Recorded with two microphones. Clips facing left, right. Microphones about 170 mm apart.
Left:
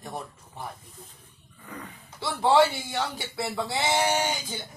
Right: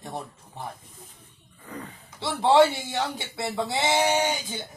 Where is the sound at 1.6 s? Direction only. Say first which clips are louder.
Right 2 dB; 30° right (ahead or behind).